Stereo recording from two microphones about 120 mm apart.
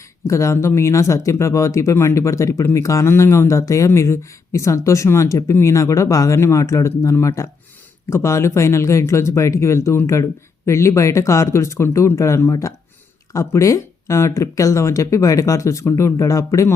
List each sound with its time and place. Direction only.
0.3 s speech: 25° left (ahead or behind)